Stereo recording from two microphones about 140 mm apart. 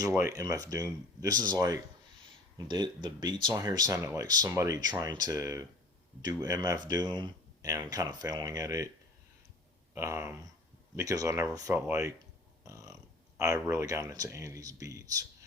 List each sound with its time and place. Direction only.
0.0 s speech: 20° right (ahead or behind)
9.9 s speech: 20° right (ahead or behind)
12.6 s a sound: 20° right (ahead or behind)
13.4 s speech: 20° right (ahead or behind)